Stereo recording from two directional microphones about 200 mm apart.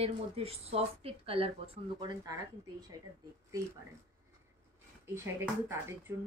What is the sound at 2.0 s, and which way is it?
Speech, 15° right (ahead or behind).